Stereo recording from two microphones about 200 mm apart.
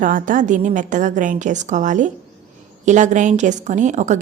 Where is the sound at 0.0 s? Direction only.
40° right (ahead or behind).